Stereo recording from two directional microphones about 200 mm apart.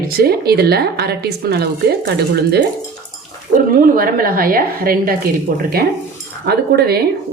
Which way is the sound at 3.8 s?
45° right (ahead or behind).